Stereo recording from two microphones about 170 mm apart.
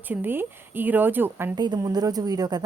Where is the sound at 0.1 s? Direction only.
10° right (ahead or behind).